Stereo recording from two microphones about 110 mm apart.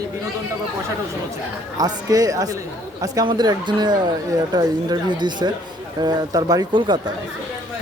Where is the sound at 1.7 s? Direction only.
35° right (ahead or behind).